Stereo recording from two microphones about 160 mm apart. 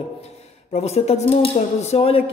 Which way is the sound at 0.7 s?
40° left (ahead or behind).